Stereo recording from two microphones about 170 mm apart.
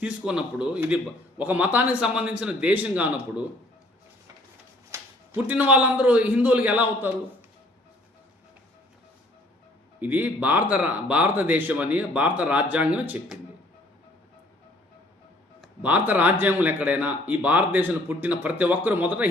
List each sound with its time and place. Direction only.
0.0 s a man's voice: 5° right (ahead or behind)
4.9 s a sound: 15° right (ahead or behind)
5.5 s speech: 10° right (ahead or behind)
10.0 s speech: 10° right (ahead or behind)
15.6 s speech: 10° right (ahead or behind)